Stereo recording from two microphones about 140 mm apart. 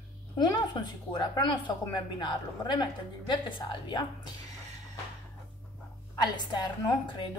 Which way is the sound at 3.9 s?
30° left (ahead or behind).